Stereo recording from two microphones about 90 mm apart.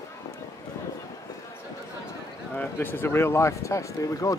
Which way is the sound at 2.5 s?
25° left (ahead or behind).